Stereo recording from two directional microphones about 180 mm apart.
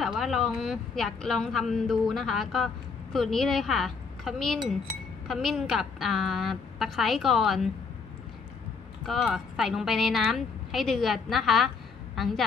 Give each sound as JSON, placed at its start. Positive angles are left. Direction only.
{"t": 0.0, "sound": "speech", "side_deg": 0}
{"t": 9.0, "sound": "speech", "side_deg": 0}